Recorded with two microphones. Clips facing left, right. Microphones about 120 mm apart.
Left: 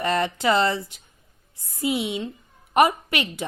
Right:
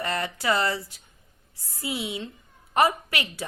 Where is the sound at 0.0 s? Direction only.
20° left (ahead or behind).